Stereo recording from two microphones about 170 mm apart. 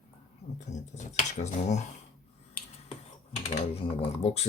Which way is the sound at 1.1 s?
40° left (ahead or behind).